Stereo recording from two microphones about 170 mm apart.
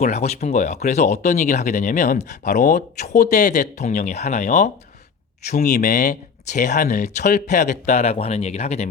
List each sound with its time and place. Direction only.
0.0 s speech: 40° left (ahead or behind)